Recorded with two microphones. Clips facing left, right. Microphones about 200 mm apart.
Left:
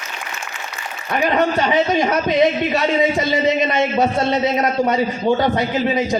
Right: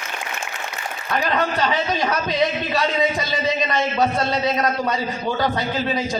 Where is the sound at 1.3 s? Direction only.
20° left (ahead or behind).